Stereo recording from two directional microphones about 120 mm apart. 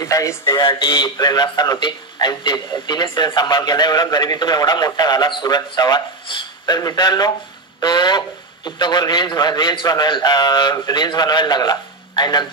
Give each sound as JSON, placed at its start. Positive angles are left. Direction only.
{"t": 0.0, "sound": "speech", "side_deg": 25}
{"t": 0.6, "sound": "a man's voice", "side_deg": 40}